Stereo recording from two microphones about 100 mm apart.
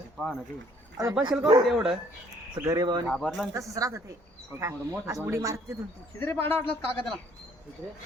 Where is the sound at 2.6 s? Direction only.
30° right (ahead or behind).